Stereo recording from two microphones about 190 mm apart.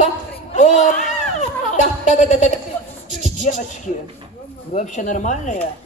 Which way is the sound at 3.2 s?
40° left (ahead or behind).